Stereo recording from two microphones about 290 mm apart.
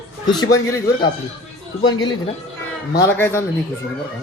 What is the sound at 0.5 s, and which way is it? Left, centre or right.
A man's voice, centre.